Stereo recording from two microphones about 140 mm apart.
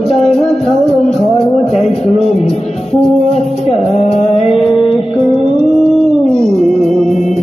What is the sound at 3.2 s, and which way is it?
Music, 50° left (ahead or behind).